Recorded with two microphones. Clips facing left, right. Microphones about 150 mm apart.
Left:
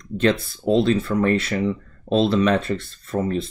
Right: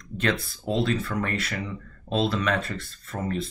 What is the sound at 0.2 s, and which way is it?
Speech, 25° left (ahead or behind).